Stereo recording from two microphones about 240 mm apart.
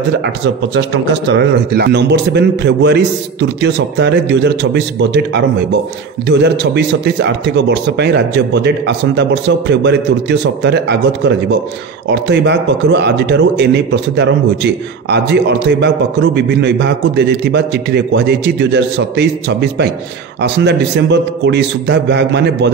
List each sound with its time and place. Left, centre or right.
0.7 s speech: right